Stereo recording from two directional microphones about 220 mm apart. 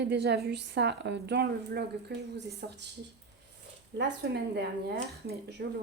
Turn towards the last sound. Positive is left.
turn(degrees=-50)  # may be behind; listen again after turning